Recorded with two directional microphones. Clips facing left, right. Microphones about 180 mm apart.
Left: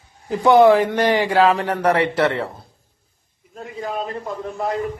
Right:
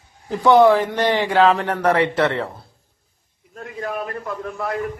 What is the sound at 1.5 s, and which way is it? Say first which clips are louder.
Speech: even; 30° left (ahead or behind).